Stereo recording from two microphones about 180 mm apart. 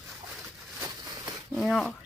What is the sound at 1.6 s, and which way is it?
Speech, centre (ahead or behind).